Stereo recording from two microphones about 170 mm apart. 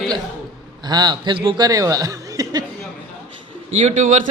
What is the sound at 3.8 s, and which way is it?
Speech, 45° right (ahead or behind).